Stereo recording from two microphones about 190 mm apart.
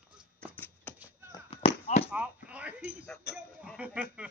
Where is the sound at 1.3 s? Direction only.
30° left (ahead or behind).